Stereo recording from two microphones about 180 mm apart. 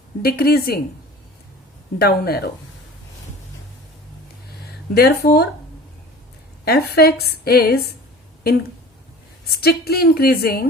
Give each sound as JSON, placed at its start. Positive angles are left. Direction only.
{"t": 0.2, "sound": "a woman's voice", "side_deg": 60}
{"t": 2.0, "sound": "a woman's voice", "side_deg": 60}
{"t": 4.9, "sound": "a woman's voice", "side_deg": 60}
{"t": 6.7, "sound": "a woman's voice", "side_deg": 60}
{"t": 9.5, "sound": "a woman's voice", "side_deg": 60}